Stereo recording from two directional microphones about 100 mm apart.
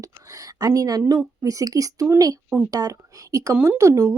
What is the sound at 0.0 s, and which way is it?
A woman's voice, 35° right (ahead or behind).